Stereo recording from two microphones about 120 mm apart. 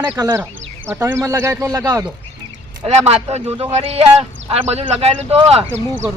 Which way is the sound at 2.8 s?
60° right (ahead or behind).